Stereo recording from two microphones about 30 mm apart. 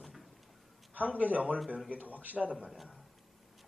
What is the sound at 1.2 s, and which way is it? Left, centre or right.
Speech, right.